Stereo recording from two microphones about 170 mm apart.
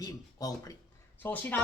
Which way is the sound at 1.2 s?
10° left (ahead or behind).